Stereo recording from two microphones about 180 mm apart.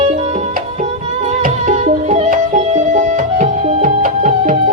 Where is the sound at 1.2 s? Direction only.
40° right (ahead or behind).